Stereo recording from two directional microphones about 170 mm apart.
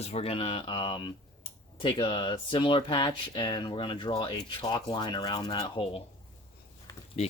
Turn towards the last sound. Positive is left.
turn(degrees=40)  # may be behind; listen again after turning